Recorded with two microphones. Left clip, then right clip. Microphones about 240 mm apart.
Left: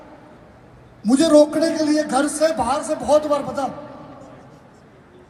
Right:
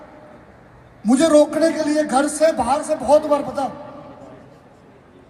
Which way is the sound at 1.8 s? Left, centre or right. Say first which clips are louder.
Even; right.